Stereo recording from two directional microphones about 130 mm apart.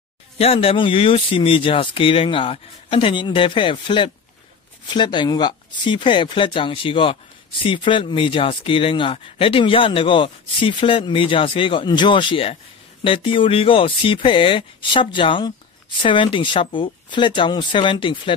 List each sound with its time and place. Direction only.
0.4 s speech: 45° left (ahead or behind)